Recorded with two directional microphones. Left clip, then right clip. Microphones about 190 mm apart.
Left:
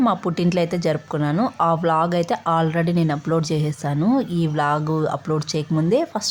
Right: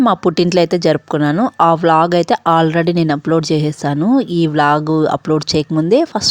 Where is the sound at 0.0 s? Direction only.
45° right (ahead or behind).